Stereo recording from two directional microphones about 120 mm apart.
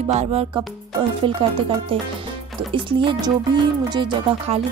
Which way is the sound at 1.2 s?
50° right (ahead or behind).